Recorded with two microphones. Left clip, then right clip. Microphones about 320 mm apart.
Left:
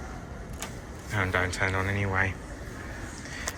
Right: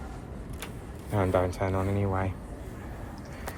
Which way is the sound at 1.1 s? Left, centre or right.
Centre.